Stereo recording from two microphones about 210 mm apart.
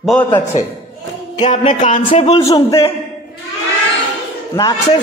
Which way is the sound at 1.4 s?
35° left (ahead or behind).